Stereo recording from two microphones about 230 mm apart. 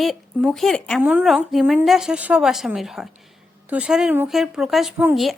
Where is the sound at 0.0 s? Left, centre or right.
Centre.